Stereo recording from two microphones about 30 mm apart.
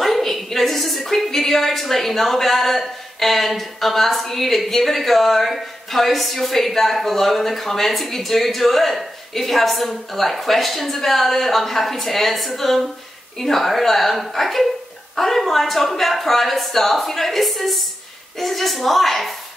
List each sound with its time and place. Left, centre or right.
0.0 s a woman's voice: centre